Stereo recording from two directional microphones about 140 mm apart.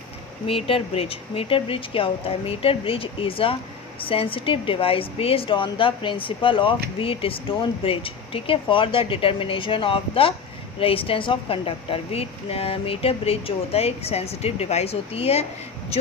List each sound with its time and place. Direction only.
0.4 s a woman's voice: 40° left (ahead or behind)